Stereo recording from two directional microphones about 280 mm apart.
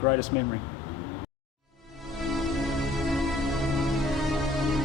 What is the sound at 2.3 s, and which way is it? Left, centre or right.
Music, centre.